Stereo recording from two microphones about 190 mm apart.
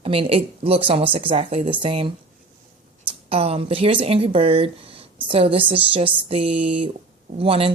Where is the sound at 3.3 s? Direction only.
30° right (ahead or behind).